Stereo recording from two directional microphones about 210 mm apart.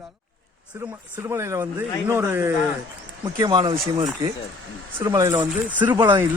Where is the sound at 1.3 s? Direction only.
15° right (ahead or behind).